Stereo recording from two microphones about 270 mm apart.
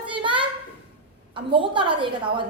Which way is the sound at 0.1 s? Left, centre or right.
Centre.